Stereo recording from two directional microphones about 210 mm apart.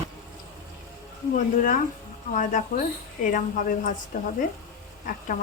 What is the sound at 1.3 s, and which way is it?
A woman's voice, 40° left (ahead or behind).